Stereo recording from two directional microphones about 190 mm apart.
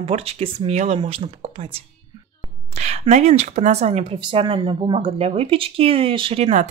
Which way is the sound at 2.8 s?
35° right (ahead or behind).